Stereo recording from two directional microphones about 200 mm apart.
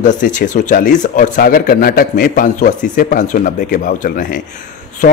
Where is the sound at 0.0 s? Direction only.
40° left (ahead or behind).